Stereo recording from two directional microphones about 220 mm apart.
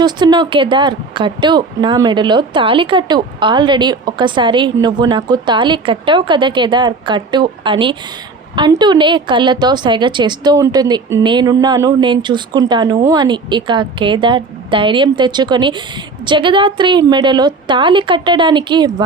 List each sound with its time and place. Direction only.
0.0 s speech: 20° right (ahead or behind)